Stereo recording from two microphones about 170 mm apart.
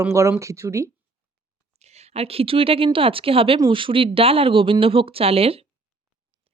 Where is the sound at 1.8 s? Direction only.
40° right (ahead or behind).